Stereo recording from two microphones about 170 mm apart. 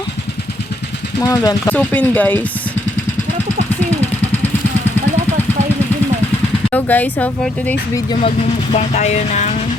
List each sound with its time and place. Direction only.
1.2 s speech: 20° left (ahead or behind)
1.7 s speech: 10° left (ahead or behind)
6.7 s speech: 10° left (ahead or behind)
7.9 s speech: 25° left (ahead or behind)
8.7 s music: 40° left (ahead or behind)